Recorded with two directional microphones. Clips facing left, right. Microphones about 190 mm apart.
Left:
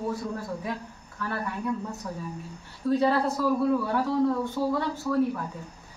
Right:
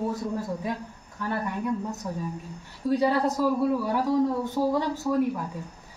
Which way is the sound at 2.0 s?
20° right (ahead or behind).